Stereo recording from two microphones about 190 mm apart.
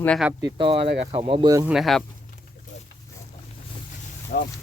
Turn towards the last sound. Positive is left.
turn(degrees=55)  # may be behind; listen again after turning